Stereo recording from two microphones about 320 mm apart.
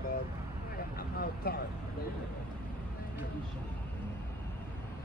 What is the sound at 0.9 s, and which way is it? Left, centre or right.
Vehicle, left.